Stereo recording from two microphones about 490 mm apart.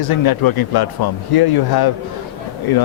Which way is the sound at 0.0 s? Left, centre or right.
Left.